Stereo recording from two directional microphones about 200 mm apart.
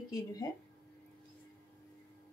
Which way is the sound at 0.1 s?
20° left (ahead or behind).